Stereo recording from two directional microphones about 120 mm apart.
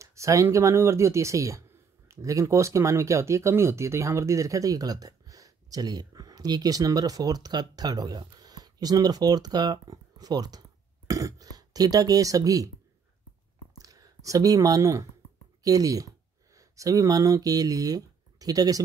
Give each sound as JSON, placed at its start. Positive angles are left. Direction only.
{"t": 0.0, "sound": "speech", "side_deg": -25}
{"t": 13.7, "sound": "speech", "side_deg": -30}